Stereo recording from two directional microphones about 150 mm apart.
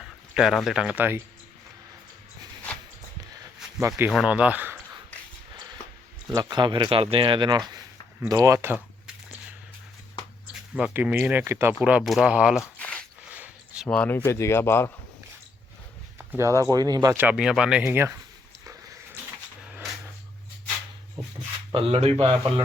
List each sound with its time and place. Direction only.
0.0 s speech: 5° right (ahead or behind)
3.8 s speech: 15° right (ahead or behind)
4.1 s speech: 5° right (ahead or behind)
6.3 s speech: 25° right (ahead or behind)
10.8 s speech: 10° right (ahead or behind)
12.8 s a sound: 10° left (ahead or behind)
13.3 s a sound: 10° right (ahead or behind)
13.8 s speech: 5° left (ahead or behind)
14.3 s speech: 20° left (ahead or behind)
16.1 s speech: 15° right (ahead or behind)
17.2 s speech: 5° right (ahead or behind)
21.7 s speech: 40° right (ahead or behind)